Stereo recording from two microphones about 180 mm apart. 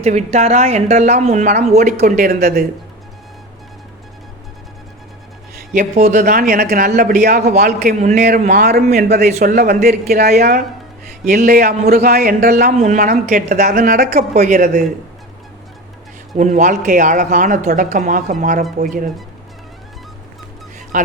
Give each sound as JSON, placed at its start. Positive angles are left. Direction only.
{"t": 0.0, "sound": "speech", "side_deg": -35}
{"t": 5.7, "sound": "speech", "side_deg": -40}
{"t": 7.2, "sound": "a man's voice", "side_deg": -60}
{"t": 8.9, "sound": "speech", "side_deg": -40}
{"t": 9.3, "sound": "a man's voice", "side_deg": -50}
{"t": 12.7, "sound": "speech", "side_deg": -40}
{"t": 14.3, "sound": "speech", "side_deg": -40}
{"t": 16.4, "sound": "speech", "side_deg": -45}
{"t": 20.9, "sound": "speech", "side_deg": -45}